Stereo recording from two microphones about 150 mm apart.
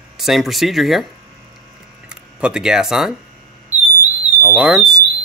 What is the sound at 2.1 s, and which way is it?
Speech, 5° right (ahead or behind).